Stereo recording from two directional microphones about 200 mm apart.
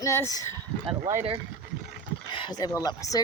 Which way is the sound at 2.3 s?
20° left (ahead or behind).